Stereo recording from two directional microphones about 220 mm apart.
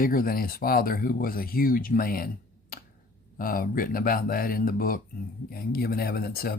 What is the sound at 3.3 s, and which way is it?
Speech, 40° left (ahead or behind).